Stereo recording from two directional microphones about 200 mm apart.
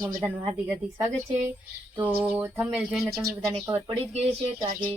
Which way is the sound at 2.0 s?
10° right (ahead or behind).